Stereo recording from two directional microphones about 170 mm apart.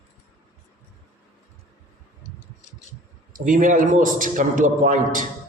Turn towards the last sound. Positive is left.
turn(degrees=-50)  # may be behind; listen again after turning